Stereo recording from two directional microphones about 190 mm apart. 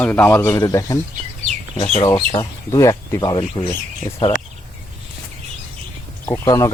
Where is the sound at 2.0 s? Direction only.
20° left (ahead or behind).